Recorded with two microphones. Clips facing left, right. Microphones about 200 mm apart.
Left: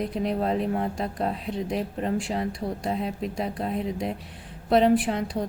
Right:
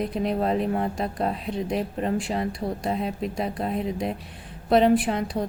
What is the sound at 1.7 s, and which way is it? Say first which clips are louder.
A woman's voice: right 2 dB; 60° right (ahead or behind).